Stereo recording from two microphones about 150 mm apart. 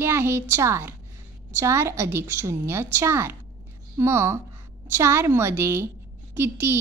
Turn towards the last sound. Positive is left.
turn(degrees=-15)  # may be behind; listen again after turning